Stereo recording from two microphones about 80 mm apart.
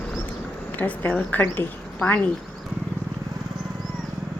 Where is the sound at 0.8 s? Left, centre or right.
Centre.